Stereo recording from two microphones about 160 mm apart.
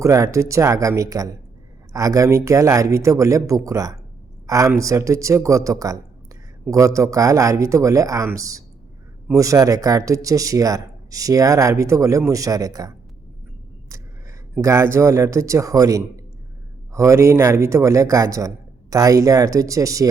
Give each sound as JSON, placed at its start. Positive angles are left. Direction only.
{"t": 0.0, "sound": "speech", "side_deg": -20}
{"t": 14.6, "sound": "speech", "side_deg": -15}